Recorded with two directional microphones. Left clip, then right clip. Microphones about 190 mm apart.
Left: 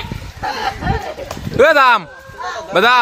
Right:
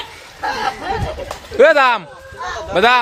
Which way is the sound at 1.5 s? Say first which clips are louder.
Left 1 dB; 25° left (ahead or behind).